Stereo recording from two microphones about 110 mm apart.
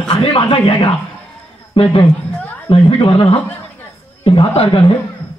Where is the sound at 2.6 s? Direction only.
55° left (ahead or behind).